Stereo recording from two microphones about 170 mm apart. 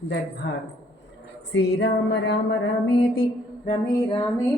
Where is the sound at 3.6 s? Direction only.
30° left (ahead or behind).